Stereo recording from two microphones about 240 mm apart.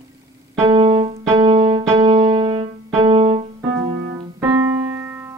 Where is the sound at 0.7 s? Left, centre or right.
Right.